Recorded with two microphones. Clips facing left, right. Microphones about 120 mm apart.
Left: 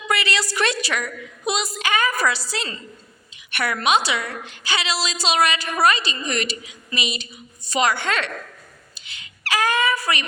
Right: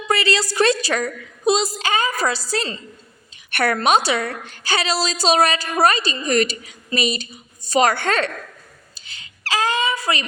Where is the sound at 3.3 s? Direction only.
45° right (ahead or behind).